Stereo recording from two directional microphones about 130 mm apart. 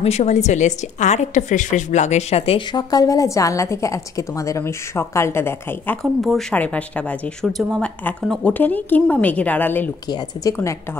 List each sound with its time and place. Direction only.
0.0 s a woman's voice: 60° left (ahead or behind)
2.7 s a woman's voice: 30° left (ahead or behind); by 9.8 s 15° left (ahead or behind)
10.0 s a woman's voice: 30° left (ahead or behind)